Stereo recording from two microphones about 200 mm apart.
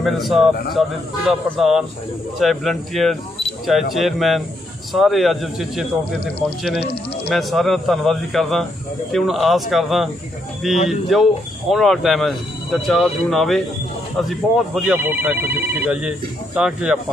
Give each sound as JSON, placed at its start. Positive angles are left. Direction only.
{"t": 0.0, "sound": "a man's voice", "side_deg": 0}